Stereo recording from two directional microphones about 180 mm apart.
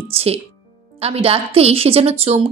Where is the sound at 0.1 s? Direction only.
35° right (ahead or behind).